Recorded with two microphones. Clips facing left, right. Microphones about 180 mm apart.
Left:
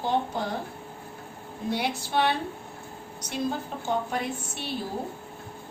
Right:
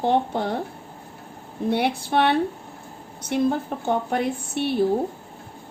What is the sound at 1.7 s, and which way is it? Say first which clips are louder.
A woman's voice: right 6 dB; 60° right (ahead or behind).